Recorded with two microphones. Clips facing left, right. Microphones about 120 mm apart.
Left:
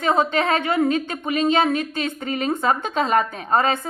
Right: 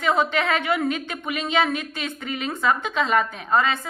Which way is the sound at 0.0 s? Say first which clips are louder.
Left 2 dB; 35° left (ahead or behind).